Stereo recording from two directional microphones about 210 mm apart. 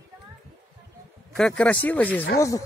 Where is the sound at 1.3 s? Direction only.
5° left (ahead or behind).